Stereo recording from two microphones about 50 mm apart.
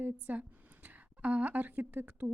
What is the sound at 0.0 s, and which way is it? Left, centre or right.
A woman's voice, right.